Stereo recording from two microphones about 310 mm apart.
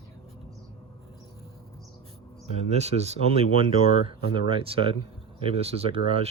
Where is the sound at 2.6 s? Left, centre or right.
Right.